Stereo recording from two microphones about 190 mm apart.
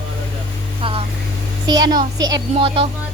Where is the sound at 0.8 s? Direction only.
25° right (ahead or behind).